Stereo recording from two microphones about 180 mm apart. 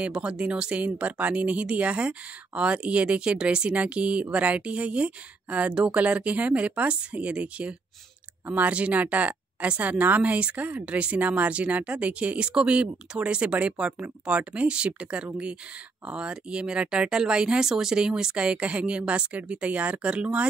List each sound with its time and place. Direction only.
0.0 s speech: 5° right (ahead or behind)